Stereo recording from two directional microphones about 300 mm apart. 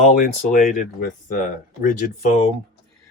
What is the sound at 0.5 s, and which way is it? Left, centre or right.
Speech, left.